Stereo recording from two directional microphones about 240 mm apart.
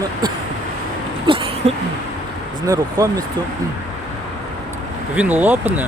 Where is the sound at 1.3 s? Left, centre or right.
Right.